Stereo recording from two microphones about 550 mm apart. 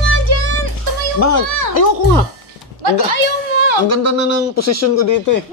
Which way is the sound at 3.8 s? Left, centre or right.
Left.